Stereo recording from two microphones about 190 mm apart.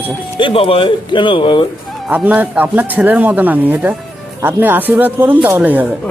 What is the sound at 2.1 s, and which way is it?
Speech, 10° right (ahead or behind).